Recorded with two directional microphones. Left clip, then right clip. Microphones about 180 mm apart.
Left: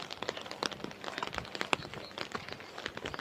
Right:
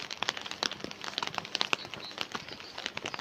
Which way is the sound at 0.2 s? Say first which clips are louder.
Right 7 dB; 20° right (ahead or behind).